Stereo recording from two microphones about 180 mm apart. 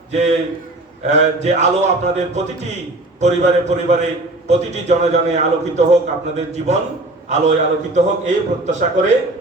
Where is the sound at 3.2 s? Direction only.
40° right (ahead or behind).